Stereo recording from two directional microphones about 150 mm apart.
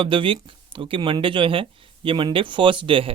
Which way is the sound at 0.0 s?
35° right (ahead or behind).